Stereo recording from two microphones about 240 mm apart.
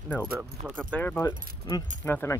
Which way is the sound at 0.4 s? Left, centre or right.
Centre.